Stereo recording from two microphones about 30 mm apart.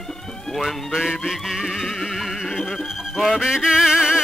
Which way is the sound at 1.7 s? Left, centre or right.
Centre.